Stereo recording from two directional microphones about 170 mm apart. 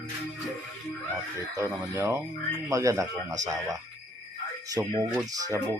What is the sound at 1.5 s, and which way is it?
Speech, 20° right (ahead or behind).